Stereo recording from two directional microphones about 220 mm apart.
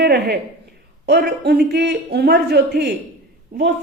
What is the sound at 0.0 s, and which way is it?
A woman's voice, 50° right (ahead or behind).